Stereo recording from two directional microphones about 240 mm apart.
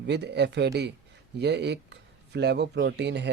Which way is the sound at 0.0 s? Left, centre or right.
Right.